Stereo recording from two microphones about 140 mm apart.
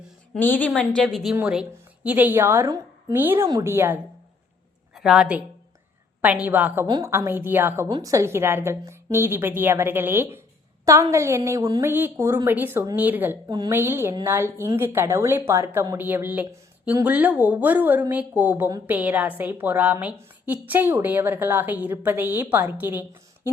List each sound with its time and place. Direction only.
0.3 s a woman's voice: 15° left (ahead or behind)
2.0 s a woman's voice: 15° right (ahead or behind)
4.9 s a woman's voice: centre (ahead or behind)
6.8 s a woman's voice: 30° right (ahead or behind)
7.1 s a woman's voice: 15° right (ahead or behind)
7.9 s a woman's voice: 30° right (ahead or behind)